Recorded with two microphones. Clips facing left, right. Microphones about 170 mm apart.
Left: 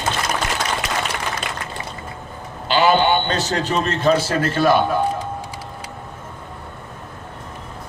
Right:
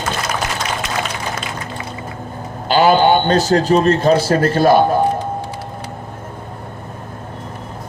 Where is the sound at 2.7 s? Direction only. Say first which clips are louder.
Right 4 dB; 40° right (ahead or behind).